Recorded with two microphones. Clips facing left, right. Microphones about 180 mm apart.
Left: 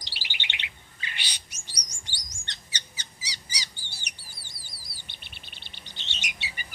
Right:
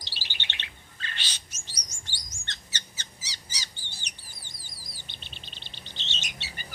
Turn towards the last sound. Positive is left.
turn(degrees=10)  # may be behind; listen again after turning